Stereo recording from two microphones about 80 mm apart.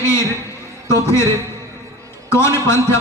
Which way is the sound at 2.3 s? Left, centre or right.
Left.